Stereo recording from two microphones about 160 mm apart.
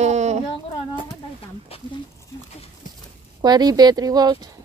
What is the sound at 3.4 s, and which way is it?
Speech, 25° right (ahead or behind).